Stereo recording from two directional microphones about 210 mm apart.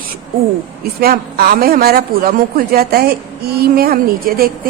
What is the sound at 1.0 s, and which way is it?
A woman's voice, 45° right (ahead or behind).